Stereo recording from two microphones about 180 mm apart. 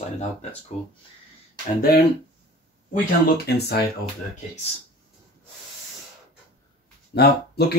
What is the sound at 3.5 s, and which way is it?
Speech, 65° left (ahead or behind).